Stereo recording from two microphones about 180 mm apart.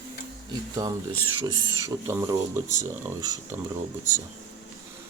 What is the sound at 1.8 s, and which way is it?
Speech, 15° right (ahead or behind).